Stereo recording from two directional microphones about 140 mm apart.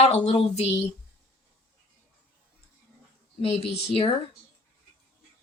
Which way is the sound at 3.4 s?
45° left (ahead or behind).